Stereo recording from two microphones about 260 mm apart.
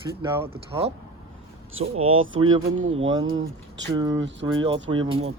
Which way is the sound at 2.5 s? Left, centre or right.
Right.